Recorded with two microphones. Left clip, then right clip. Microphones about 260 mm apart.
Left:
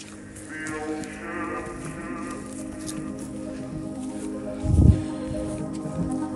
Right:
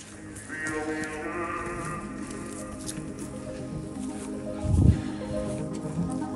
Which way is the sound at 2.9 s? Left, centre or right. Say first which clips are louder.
Left 4 dB; centre.